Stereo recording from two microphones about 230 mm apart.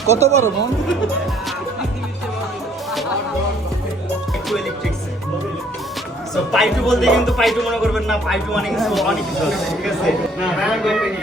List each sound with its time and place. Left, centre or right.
0.1 s speech: right
6.3 s speech: centre